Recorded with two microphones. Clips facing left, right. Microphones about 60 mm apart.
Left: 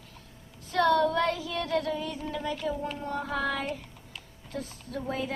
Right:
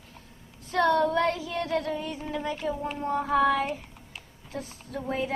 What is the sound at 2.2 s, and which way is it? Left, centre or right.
A child's voice, right.